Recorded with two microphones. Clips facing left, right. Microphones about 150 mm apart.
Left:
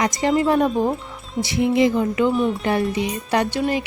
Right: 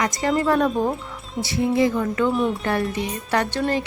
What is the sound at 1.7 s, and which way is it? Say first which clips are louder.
Music: left 2 dB; 20° left (ahead or behind).